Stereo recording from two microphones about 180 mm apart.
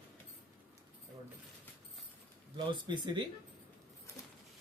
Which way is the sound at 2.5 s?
25° right (ahead or behind).